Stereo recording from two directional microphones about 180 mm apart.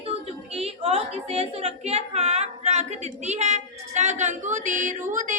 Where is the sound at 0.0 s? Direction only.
35° right (ahead or behind).